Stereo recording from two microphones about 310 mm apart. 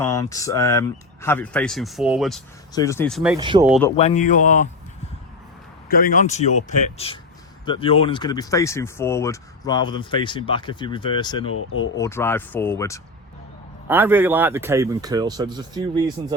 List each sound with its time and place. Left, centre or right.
0.0 s speech: centre
3.3 s speech: centre
3.7 s speech: centre
3.9 s speech: left
5.9 s speech: left
11.5 s speech: left
11.9 s speech: centre
13.8 s speech: centre